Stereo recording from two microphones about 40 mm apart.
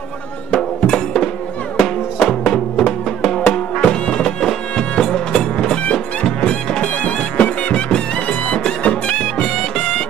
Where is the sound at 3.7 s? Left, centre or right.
Left.